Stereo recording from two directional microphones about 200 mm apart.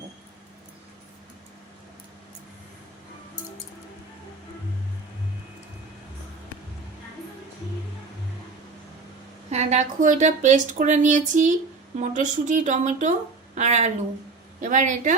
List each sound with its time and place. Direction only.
9.5 s a woman's voice: 35° right (ahead or behind)